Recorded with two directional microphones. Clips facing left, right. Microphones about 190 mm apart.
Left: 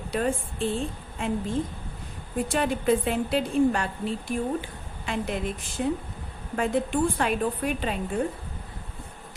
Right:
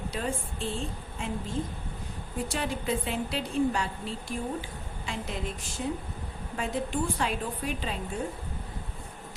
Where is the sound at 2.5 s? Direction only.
55° left (ahead or behind).